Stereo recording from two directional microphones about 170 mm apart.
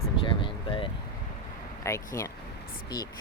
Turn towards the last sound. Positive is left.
turn(degrees=25)  # may be behind; listen again after turning